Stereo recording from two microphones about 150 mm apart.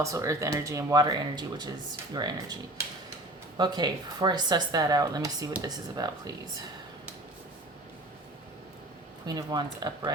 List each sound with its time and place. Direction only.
0.0 s speech: 20° right (ahead or behind)
3.6 s speech: 30° right (ahead or behind)
9.2 s speech: 25° right (ahead or behind)